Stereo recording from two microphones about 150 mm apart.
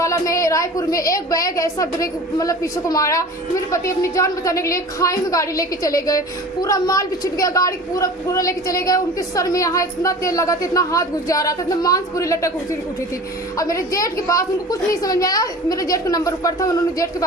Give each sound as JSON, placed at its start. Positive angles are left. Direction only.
{"t": 0.0, "sound": "a woman's voice", "side_deg": 20}
{"t": 13.6, "sound": "a woman's voice", "side_deg": 20}